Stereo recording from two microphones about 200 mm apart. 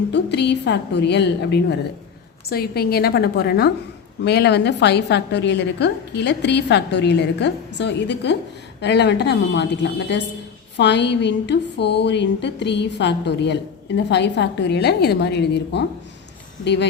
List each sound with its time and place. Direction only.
0.1 s a woman's voice: 60° left (ahead or behind)